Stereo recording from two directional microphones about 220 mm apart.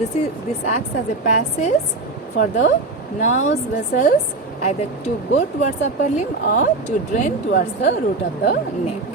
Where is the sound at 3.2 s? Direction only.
35° left (ahead or behind).